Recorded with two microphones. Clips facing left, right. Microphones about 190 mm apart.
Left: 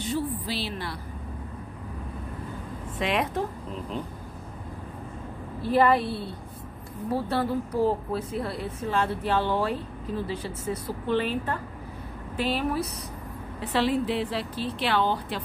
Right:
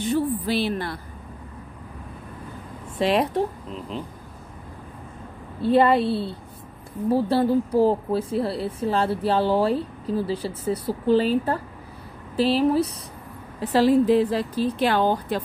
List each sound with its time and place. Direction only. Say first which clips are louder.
0.0 s a woman's voice: right 6 dB; 55° right (ahead or behind)
3.0 s a woman's voice: right 6 dB; 35° right (ahead or behind)
5.6 s a woman's voice: right 4 dB; 25° right (ahead or behind); by 15.4 s 45° right (ahead or behind)